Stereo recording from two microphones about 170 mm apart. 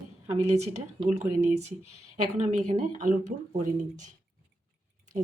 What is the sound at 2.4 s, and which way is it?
Speech, 45° right (ahead or behind).